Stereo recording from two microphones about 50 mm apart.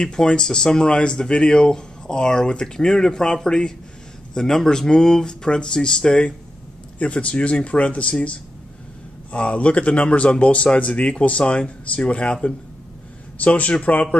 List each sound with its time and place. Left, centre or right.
0.0 s speech: centre
7.0 s speech: left
13.4 s speech: left